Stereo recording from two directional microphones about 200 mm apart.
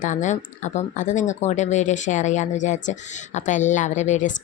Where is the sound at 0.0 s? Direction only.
40° left (ahead or behind).